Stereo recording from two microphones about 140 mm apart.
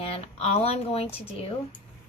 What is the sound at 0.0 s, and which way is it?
Speech, 45° left (ahead or behind).